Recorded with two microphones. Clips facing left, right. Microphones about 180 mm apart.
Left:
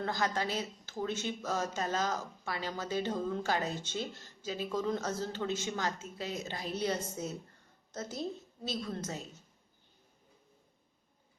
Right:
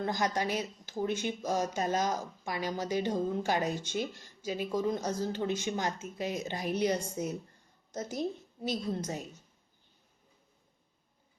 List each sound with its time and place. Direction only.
0.0 s a woman's voice: 15° right (ahead or behind)